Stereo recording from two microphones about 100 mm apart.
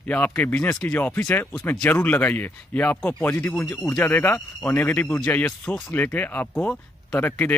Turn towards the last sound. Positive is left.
turn(degrees=20)  # may be behind; listen again after turning